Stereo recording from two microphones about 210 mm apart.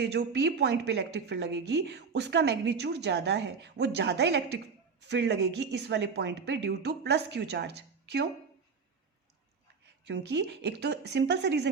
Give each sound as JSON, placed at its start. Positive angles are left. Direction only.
{"t": 0.0, "sound": "a woman's voice", "side_deg": -55}
{"t": 9.8, "sound": "a woman's voice", "side_deg": -55}